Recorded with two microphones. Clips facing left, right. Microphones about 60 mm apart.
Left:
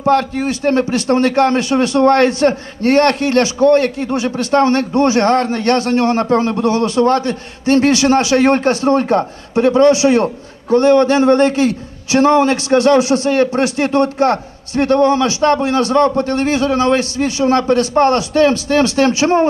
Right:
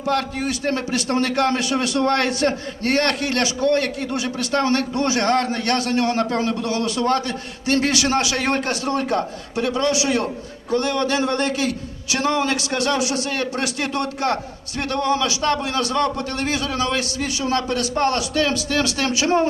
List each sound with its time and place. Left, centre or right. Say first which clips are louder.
0.0 s a man's voice: left 8 dB; left